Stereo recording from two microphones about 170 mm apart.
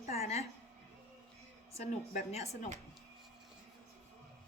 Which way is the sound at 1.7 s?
40° left (ahead or behind).